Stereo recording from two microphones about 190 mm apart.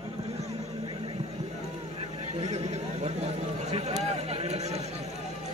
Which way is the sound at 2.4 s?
35° right (ahead or behind).